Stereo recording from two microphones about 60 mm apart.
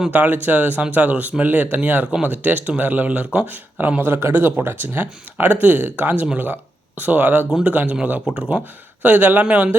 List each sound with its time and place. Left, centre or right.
0.1 s speech: right
4.1 s speech: right; by 8.6 s centre
9.0 s speech: right